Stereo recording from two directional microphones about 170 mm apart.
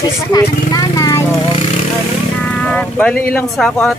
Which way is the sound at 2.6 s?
5° left (ahead or behind).